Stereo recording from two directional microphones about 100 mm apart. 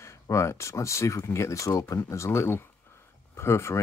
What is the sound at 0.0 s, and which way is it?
Speech, 30° left (ahead or behind).